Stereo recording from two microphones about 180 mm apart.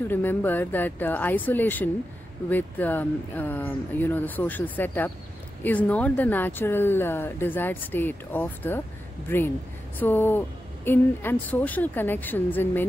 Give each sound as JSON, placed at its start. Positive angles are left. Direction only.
{"t": 0.1, "sound": "speech", "side_deg": 10}